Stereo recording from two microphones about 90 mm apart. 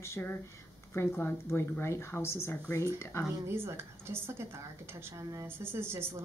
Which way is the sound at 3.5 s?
30° right (ahead or behind).